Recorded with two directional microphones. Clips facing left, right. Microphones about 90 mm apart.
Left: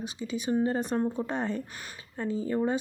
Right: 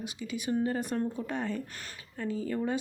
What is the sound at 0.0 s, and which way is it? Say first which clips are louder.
Speech: left 3 dB; 30° left (ahead or behind).